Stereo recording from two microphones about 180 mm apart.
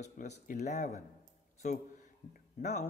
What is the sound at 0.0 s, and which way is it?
Speech, 40° left (ahead or behind).